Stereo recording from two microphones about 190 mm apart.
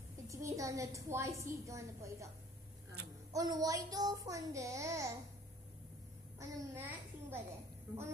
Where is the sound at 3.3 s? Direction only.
20° right (ahead or behind).